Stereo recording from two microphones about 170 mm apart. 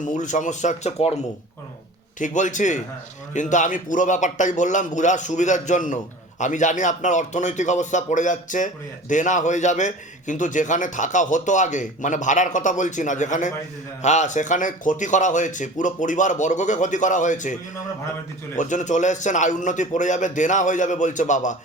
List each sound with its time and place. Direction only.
0.0 s speech: 45° left (ahead or behind)
2.1 s speech: 45° left (ahead or behind)